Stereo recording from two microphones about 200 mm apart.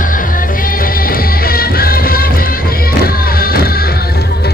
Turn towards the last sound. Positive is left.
turn(degrees=50)  # may be behind; listen again after turning